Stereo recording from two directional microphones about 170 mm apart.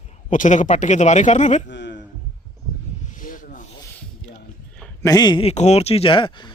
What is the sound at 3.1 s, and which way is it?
Rub, 50° left (ahead or behind).